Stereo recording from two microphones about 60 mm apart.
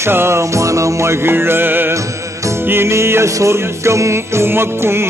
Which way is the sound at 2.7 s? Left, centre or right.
Right.